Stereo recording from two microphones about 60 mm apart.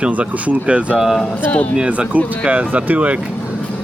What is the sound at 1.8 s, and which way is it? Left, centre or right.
Speech, centre.